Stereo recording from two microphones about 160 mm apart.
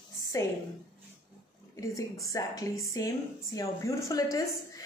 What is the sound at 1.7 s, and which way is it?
A woman's voice, 20° left (ahead or behind).